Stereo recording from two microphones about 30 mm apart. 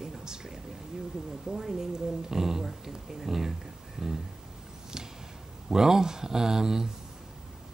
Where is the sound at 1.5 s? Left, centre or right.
Centre.